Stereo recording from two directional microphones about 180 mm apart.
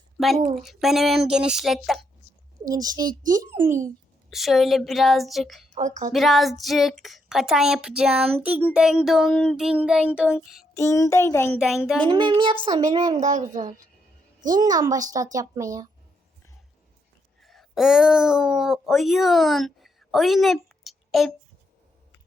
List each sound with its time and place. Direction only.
0.5 s speech: centre (ahead or behind)
2.6 s a child's voice: 20° right (ahead or behind)
4.3 s speech: centre (ahead or behind)
5.7 s speech: 40° right (ahead or behind)
6.1 s speech: centre (ahead or behind)
10.8 s child singing: 15° left (ahead or behind)
11.6 s speech: 5° right (ahead or behind)
12.0 s a child's voice: 25° right (ahead or behind)
13.2 s speech: 45° right (ahead or behind)
14.5 s a child's voice: 20° right (ahead or behind)
17.4 s speech: centre (ahead or behind)